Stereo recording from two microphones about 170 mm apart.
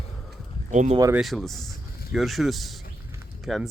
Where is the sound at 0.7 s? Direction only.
45° right (ahead or behind).